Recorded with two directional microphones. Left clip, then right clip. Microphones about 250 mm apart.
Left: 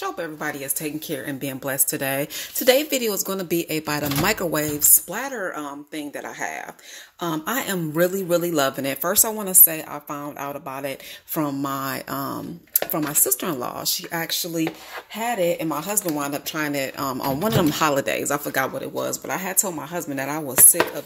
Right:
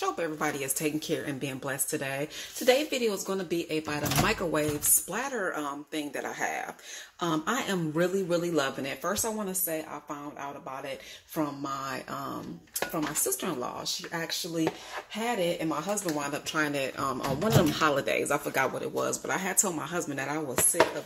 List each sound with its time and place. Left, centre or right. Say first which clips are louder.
0.0 s speech: left 2 dB; centre
20.2 s speech: left 5 dB; left